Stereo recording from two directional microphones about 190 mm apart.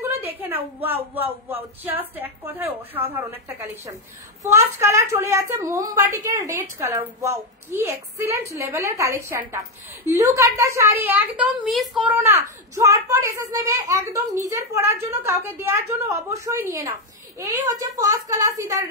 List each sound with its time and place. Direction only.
0.2 s a woman's voice: 10° right (ahead or behind)